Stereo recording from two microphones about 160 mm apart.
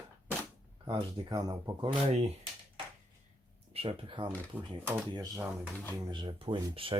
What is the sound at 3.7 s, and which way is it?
Speech, 35° right (ahead or behind).